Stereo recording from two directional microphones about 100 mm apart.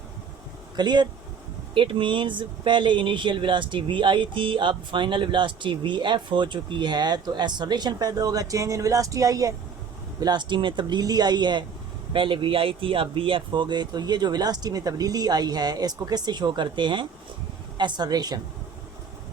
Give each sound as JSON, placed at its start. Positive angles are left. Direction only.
{"t": 0.8, "sound": "speech", "side_deg": -45}
{"t": 1.7, "sound": "speech", "side_deg": -60}
{"t": 10.2, "sound": "speech", "side_deg": -45}
{"t": 12.1, "sound": "speech", "side_deg": -60}